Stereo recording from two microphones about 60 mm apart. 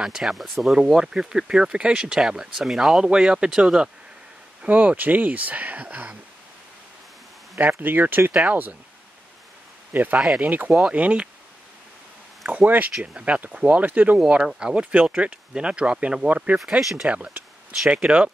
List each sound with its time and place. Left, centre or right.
0.0 s speech: centre
4.6 s speech: right
7.5 s speech: right
10.1 s speech: centre
10.4 s speech: right
12.4 s speech: right
14.3 s speech: centre
16.8 s speech: centre
17.1 s speech: right